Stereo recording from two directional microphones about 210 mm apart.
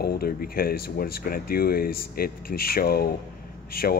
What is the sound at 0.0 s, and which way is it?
Speech, 45° left (ahead or behind).